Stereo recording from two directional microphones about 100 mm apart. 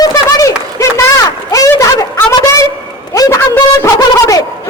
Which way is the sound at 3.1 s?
35° left (ahead or behind).